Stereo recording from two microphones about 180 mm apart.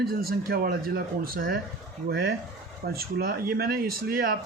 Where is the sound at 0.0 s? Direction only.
55° right (ahead or behind).